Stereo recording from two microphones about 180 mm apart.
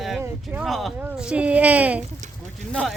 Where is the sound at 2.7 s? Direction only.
5° left (ahead or behind).